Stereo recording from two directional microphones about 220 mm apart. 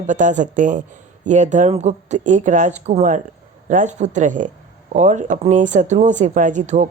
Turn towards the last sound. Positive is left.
turn(degrees=-35)  # may be behind; listen again after turning